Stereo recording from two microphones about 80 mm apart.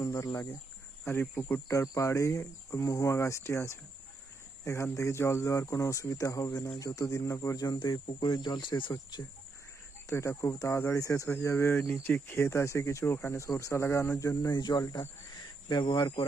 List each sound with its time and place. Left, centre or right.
0.0 s speech: left
1.0 s speech: left
1.6 s speech: left
7.8 s speech: left
8.9 s speech: left
10.1 s speech: left
14.5 s speech: left